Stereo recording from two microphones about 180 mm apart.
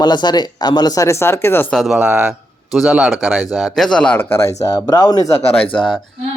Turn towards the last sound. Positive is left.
turn(degrees=0)  # may be behind; listen again after turning